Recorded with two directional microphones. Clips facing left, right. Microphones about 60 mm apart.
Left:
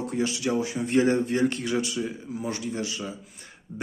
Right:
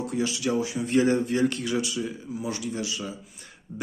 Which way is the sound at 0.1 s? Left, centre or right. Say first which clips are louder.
Even; left.